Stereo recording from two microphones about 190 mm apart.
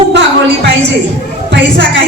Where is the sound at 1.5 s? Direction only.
65° right (ahead or behind).